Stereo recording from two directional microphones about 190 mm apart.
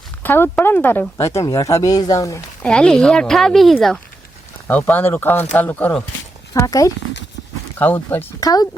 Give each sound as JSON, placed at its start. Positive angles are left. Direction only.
{"t": 0.2, "sound": "speech", "side_deg": 10}
{"t": 2.6, "sound": "speech", "side_deg": 5}